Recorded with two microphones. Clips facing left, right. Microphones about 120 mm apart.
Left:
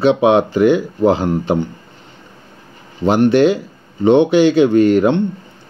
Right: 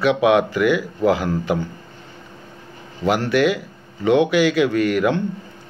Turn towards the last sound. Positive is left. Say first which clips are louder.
# left 7 dB
turn(degrees=30)  # may be behind; listen again after turning